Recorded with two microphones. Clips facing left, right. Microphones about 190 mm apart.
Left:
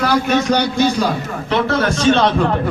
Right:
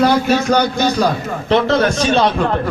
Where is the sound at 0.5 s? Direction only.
40° right (ahead or behind).